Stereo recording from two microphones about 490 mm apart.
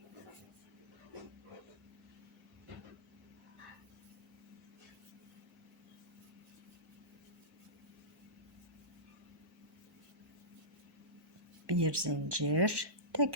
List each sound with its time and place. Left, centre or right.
11.6 s speech: right